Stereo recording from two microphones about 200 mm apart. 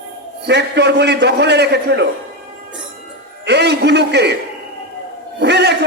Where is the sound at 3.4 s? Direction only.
55° right (ahead or behind).